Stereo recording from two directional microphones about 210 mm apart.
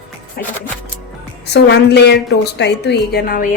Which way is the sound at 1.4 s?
55° left (ahead or behind).